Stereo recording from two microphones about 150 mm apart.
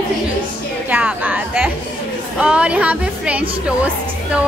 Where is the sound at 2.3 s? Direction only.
10° right (ahead or behind).